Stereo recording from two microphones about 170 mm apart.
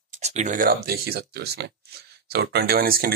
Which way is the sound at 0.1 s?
45° right (ahead or behind).